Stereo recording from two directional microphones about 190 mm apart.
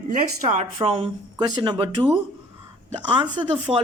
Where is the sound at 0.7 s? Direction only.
25° right (ahead or behind).